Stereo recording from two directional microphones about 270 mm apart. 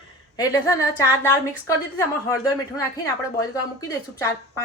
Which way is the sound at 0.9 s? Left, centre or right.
Centre.